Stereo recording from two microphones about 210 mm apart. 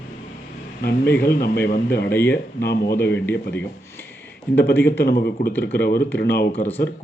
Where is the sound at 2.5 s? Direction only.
45° left (ahead or behind).